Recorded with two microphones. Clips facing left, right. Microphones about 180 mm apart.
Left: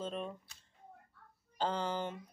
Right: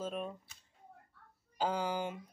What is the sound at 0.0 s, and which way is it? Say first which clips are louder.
Speech: right 1 dB; 5° right (ahead or behind).